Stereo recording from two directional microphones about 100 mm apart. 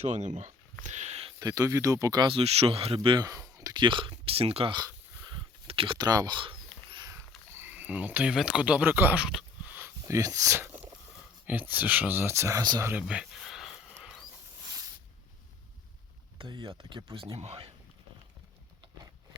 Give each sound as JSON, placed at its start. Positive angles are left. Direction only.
{"t": 1.0, "sound": "a sound", "side_deg": -90}
{"t": 1.4, "sound": "speech", "side_deg": -35}
{"t": 2.2, "sound": "speech", "side_deg": -75}
{"t": 3.2, "sound": "speech", "side_deg": -35}
{"t": 3.8, "sound": "speech", "side_deg": -55}
{"t": 5.6, "sound": "speech", "side_deg": -65}
{"t": 6.0, "sound": "speech", "side_deg": -45}
{"t": 7.1, "sound": "a sound", "side_deg": -25}
{"t": 9.8, "sound": "speech", "side_deg": -30}
{"t": 10.6, "sound": "a sound", "side_deg": -20}
{"t": 11.4, "sound": "speech", "side_deg": -20}
{"t": 12.8, "sound": "a sound", "side_deg": -15}
{"t": 16.4, "sound": "speech", "side_deg": -55}